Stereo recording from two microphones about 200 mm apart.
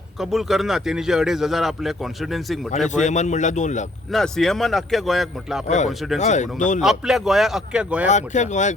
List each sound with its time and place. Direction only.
0.2 s a man's voice: centre (ahead or behind)
2.9 s speech: 35° left (ahead or behind)
4.1 s a man's voice: centre (ahead or behind)
5.6 s speech: 35° left (ahead or behind)
6.8 s a man's voice: centre (ahead or behind)
8.1 s speech: 35° left (ahead or behind)